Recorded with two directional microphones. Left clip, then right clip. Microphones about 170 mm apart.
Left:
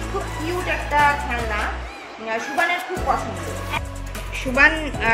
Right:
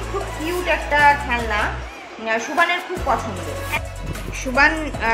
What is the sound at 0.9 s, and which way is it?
Speech, 25° right (ahead or behind).